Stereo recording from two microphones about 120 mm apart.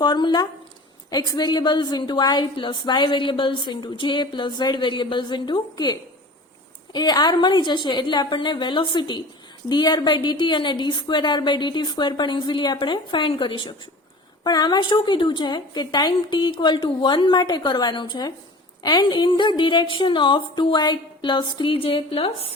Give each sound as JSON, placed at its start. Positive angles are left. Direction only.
{"t": 0.0, "sound": "a woman's voice", "side_deg": 40}